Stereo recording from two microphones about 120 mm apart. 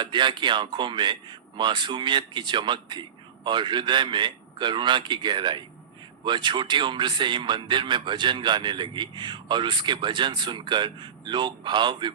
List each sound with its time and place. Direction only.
0.0 s a man's voice: 40° right (ahead or behind)